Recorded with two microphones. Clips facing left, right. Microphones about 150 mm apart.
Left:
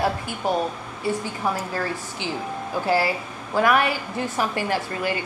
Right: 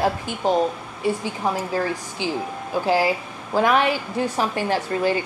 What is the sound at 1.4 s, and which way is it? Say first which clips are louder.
Speech: right 5 dB; 15° right (ahead or behind).